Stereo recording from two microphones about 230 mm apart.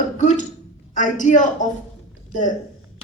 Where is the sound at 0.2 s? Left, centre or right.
Left.